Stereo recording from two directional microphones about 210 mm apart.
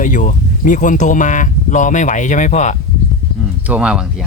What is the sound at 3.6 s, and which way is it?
Speech, 5° right (ahead or behind).